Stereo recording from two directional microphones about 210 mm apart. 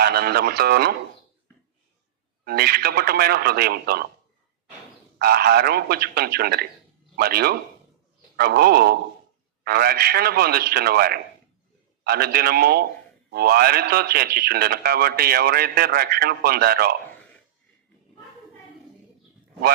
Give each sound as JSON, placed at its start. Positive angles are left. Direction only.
{"t": 0.0, "sound": "speech", "side_deg": -50}
{"t": 2.4, "sound": "a man's voice", "side_deg": -50}
{"t": 5.2, "sound": "a man's voice", "side_deg": -50}